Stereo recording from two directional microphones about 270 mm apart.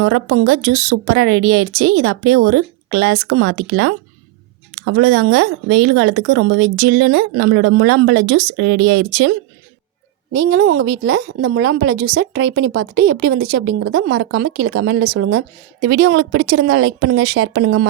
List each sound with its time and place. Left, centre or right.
0.0 s speech: right
10.3 s a woman's voice: right